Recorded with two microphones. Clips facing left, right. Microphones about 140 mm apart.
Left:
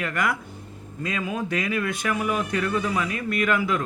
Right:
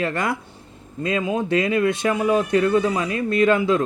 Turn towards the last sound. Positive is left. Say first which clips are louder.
# right 6 dB
turn(degrees=-25)  # may be behind; listen again after turning